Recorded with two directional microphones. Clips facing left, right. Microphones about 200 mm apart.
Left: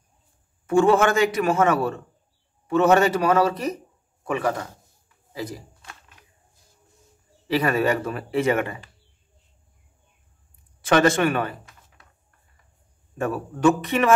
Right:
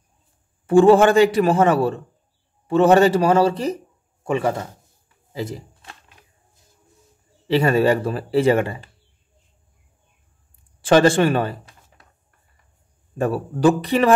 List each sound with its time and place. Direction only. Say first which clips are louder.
0.7 s a man's voice: right 6 dB; 30° right (ahead or behind)
5.3 s shuffling cards: right 4 dB; 25° right (ahead or behind)
7.4 s speech: right 5 dB; 25° right (ahead or behind)
10.8 s speech: right 4 dB; 30° right (ahead or behind)
13.2 s speech: right 3 dB; 35° right (ahead or behind)